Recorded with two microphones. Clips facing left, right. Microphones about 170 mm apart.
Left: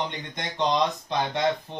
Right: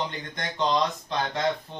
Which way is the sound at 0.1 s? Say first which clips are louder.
Even; 20° left (ahead or behind).